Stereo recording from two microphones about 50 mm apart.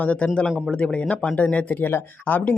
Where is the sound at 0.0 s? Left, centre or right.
Left.